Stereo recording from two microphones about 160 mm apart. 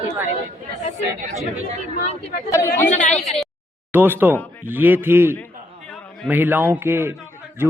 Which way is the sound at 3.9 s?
10° right (ahead or behind).